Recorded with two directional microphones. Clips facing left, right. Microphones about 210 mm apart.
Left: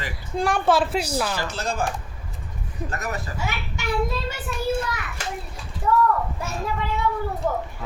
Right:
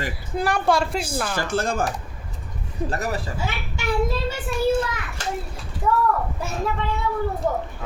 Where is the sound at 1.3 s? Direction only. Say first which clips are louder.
Right 4 dB; 50° right (ahead or behind).